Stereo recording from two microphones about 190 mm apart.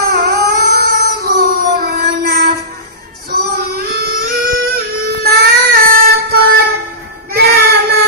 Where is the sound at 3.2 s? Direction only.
55° right (ahead or behind).